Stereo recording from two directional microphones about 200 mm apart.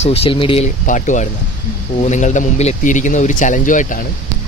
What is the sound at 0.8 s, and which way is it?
Speech, 40° left (ahead or behind).